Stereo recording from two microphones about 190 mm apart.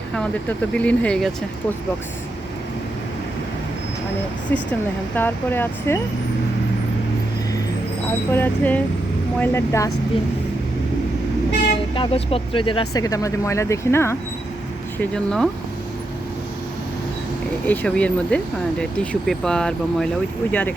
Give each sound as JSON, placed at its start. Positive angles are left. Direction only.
{"t": 0.7, "sound": "speech", "side_deg": 5}
{"t": 5.1, "sound": "speech", "side_deg": 10}
{"t": 8.3, "sound": "speech", "side_deg": 10}
{"t": 11.9, "sound": "speech", "side_deg": 30}
{"t": 17.7, "sound": "speech", "side_deg": 5}